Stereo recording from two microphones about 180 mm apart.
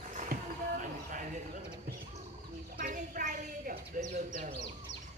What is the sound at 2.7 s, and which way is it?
Bird, 50° right (ahead or behind).